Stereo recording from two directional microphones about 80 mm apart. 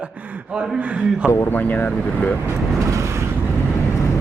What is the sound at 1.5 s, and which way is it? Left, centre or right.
Speech, left.